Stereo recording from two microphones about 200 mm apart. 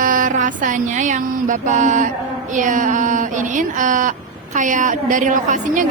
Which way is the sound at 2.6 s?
40° right (ahead or behind).